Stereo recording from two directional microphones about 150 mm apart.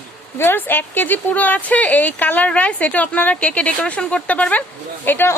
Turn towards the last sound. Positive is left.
turn(degrees=15)  # may be behind; listen again after turning